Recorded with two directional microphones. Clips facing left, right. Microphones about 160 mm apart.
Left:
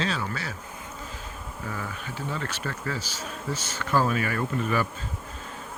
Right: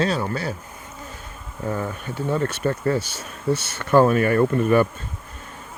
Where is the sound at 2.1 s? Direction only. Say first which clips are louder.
Right 10 dB; 50° right (ahead or behind).